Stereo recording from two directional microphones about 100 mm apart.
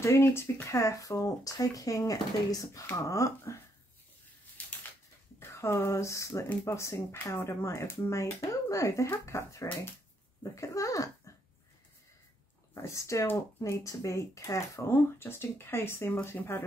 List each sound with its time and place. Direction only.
0.0 s speech: 25° left (ahead or behind)
4.6 s a sound: 15° left (ahead or behind)
5.4 s speech: 25° left (ahead or behind)
12.8 s speech: 30° left (ahead or behind)